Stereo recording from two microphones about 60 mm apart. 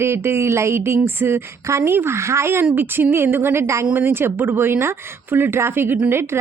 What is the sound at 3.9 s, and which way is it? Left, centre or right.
Speech, right.